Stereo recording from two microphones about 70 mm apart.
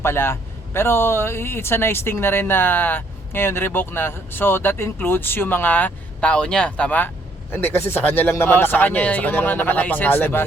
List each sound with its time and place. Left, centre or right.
0.0 s a man's voice: left
7.5 s speech: left